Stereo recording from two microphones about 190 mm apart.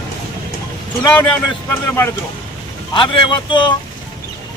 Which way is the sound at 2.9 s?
25° left (ahead or behind).